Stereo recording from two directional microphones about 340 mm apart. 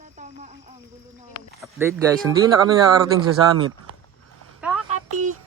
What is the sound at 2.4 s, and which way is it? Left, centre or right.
Speech, centre.